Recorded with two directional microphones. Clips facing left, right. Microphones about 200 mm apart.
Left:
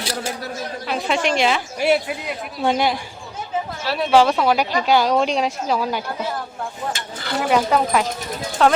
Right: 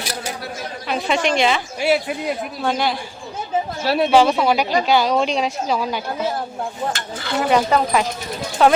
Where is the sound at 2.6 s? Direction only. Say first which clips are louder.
Left 4 dB; 20° left (ahead or behind).